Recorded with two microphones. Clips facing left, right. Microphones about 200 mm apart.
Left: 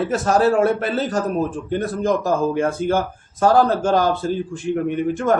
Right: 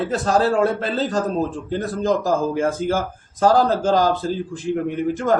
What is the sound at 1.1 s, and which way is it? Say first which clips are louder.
Speech: even; 15° left (ahead or behind).